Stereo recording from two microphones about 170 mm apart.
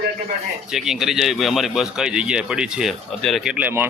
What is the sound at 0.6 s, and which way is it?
Speech, centre (ahead or behind).